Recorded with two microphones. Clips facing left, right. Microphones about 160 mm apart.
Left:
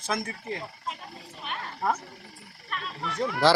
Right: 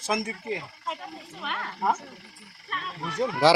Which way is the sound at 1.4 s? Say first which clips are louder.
Right 2 dB; 70° right (ahead or behind).